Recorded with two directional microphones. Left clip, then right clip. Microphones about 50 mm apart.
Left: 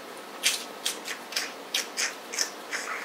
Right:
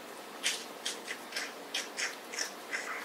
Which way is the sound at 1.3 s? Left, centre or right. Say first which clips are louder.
Left 8 dB; left.